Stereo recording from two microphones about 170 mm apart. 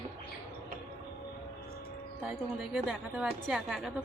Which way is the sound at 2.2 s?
5° right (ahead or behind).